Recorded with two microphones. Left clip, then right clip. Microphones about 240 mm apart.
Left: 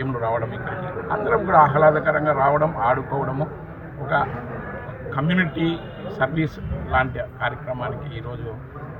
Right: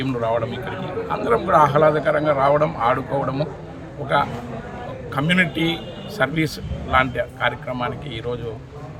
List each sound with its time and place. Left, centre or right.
0.0 s a man's voice: right
5.2 s a man's voice: right